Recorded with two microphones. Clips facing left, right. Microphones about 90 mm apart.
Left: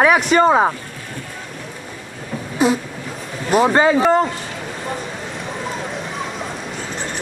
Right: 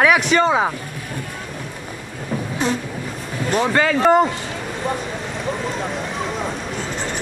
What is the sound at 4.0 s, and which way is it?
Speech, 5° right (ahead or behind).